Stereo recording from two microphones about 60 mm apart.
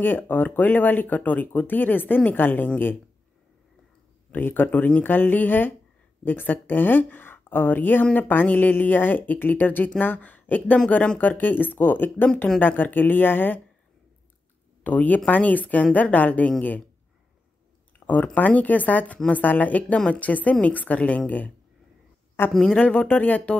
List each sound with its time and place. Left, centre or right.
0.0 s speech: left
4.3 s speech: left
14.8 s a woman's voice: left
17.9 s a woman's voice: left
22.5 s speech: centre
22.8 s a woman's voice: left